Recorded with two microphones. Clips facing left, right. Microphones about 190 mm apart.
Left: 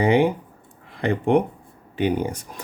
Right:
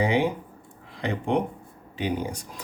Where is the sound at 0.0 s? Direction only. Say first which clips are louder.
Left 5 dB; 55° left (ahead or behind).